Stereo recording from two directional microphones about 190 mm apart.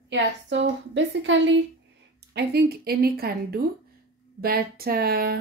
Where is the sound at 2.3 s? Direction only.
60° right (ahead or behind).